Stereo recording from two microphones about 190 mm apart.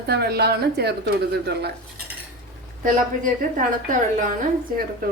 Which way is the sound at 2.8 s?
45° right (ahead or behind).